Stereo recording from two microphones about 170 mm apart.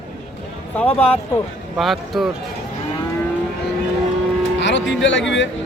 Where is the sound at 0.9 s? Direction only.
10° left (ahead or behind).